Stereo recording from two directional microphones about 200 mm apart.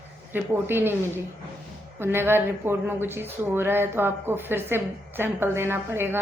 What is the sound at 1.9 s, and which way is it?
Speech, 10° right (ahead or behind).